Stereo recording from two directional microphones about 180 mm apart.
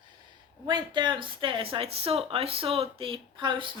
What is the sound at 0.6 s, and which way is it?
Speech, 25° right (ahead or behind).